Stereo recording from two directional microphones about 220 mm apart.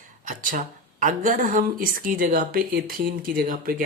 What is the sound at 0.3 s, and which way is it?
Speech, 35° right (ahead or behind).